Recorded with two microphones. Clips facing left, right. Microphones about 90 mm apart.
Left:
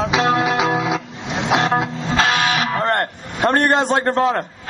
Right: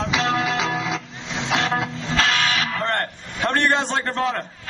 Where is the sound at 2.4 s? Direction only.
55° left (ahead or behind).